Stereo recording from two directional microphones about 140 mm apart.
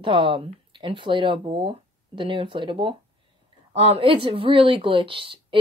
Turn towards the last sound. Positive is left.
turn(degrees=-40)  # may be behind; listen again after turning